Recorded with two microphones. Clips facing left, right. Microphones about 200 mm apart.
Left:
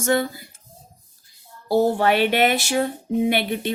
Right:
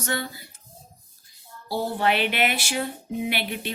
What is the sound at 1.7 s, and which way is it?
Speech, 45° left (ahead or behind).